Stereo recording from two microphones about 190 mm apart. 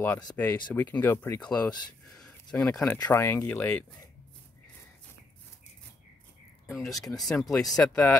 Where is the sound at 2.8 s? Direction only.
15° left (ahead or behind).